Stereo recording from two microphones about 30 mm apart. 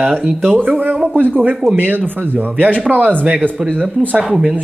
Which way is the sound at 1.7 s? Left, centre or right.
Right.